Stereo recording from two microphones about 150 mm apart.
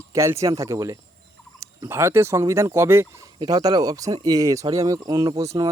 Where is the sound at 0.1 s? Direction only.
20° right (ahead or behind).